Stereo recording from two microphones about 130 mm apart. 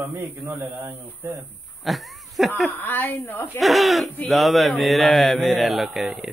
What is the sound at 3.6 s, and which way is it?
Speech, centre (ahead or behind).